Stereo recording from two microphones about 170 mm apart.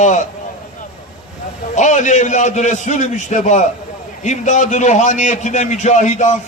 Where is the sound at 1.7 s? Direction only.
45° left (ahead or behind).